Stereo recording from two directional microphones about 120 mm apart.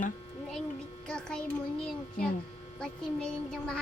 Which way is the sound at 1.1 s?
5° left (ahead or behind).